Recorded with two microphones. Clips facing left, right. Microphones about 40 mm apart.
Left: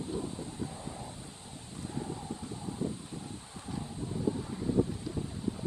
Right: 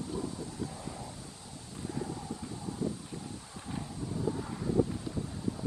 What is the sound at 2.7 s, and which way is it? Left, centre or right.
Vehicle, left.